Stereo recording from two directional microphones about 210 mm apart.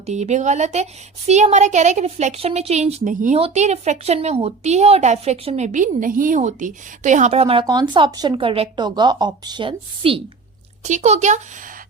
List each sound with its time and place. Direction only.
0.0 s a woman's voice: 30° right (ahead or behind)